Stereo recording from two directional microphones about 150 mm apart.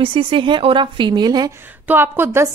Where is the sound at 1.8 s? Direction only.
15° right (ahead or behind).